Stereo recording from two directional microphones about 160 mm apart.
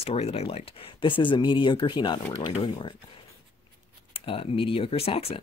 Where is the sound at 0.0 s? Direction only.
40° left (ahead or behind).